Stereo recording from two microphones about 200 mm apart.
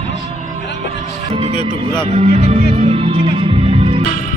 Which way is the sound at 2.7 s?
30° right (ahead or behind).